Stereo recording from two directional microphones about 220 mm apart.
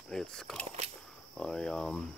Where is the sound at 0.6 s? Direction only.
30° right (ahead or behind).